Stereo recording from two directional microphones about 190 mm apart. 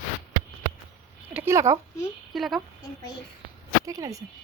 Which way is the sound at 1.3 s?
10° right (ahead or behind).